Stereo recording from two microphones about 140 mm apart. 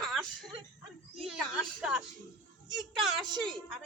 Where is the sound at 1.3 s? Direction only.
5° right (ahead or behind).